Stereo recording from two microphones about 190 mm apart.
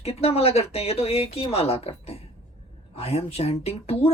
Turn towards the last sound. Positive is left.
turn(degrees=30)  # may be behind; listen again after turning